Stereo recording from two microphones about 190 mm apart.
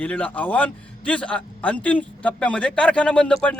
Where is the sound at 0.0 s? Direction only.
10° left (ahead or behind).